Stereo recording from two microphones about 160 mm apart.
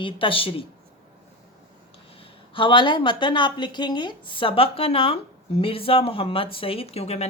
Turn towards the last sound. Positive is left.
turn(degrees=40)  # may be behind; listen again after turning